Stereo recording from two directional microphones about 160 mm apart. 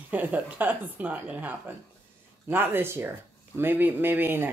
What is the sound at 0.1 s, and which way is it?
Speech, 10° right (ahead or behind).